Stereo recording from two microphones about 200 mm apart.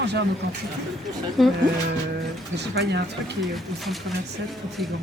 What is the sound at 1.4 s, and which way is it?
Speech, centre (ahead or behind).